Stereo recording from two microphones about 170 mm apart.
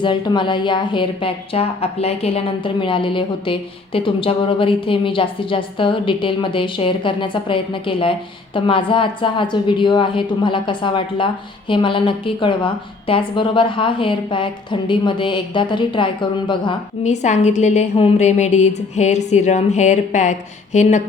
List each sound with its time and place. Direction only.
0.0 s a woman's voice: 30° left (ahead or behind)
17.0 s a woman's voice: 45° left (ahead or behind)